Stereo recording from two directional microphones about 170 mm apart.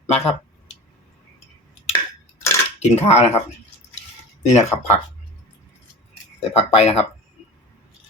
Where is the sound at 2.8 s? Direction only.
40° left (ahead or behind).